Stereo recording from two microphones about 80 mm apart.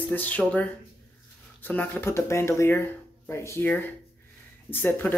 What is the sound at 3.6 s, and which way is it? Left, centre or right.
Speech, left.